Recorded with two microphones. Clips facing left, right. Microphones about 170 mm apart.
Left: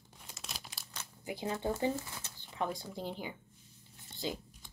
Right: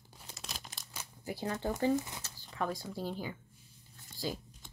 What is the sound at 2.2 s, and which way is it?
Speech, 20° left (ahead or behind).